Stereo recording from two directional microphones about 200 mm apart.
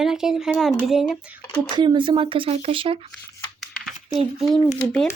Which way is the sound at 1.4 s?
5° left (ahead or behind).